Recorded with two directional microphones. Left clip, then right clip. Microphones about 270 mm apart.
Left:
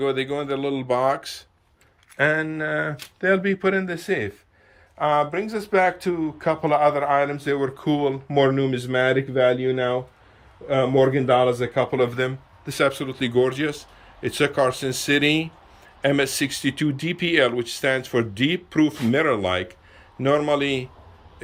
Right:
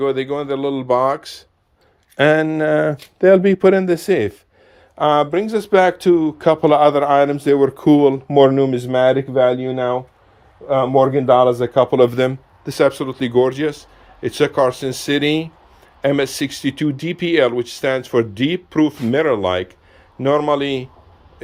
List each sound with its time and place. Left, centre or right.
0.0 s speech: centre
2.1 s a man's voice: right